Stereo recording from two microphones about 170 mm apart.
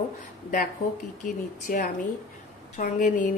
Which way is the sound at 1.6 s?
50° left (ahead or behind).